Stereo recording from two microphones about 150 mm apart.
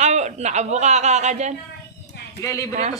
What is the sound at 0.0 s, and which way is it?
A man's voice, 50° right (ahead or behind).